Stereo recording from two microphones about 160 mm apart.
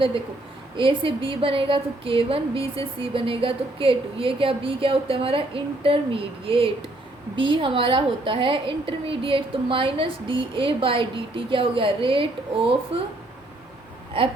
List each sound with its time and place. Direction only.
0.8 s a woman's voice: 30° right (ahead or behind)